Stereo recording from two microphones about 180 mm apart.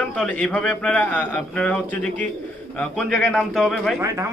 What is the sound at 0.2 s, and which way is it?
A man's voice, 5° left (ahead or behind).